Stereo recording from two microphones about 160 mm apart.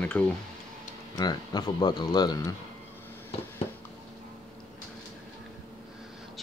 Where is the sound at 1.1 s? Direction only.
25° left (ahead or behind).